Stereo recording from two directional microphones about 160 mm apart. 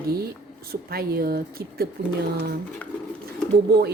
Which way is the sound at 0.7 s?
75° right (ahead or behind).